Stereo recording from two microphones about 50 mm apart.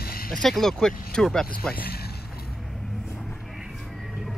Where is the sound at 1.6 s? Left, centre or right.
Left.